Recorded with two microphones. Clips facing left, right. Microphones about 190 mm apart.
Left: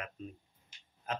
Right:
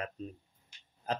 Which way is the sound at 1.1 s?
35° right (ahead or behind).